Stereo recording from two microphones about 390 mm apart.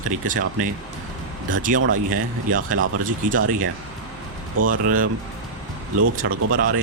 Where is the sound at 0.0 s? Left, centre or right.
Centre.